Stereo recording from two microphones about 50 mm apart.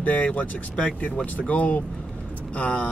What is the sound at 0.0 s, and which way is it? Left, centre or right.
Speech, left.